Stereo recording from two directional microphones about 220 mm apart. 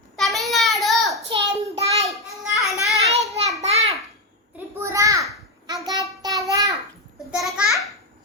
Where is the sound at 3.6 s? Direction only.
30° right (ahead or behind).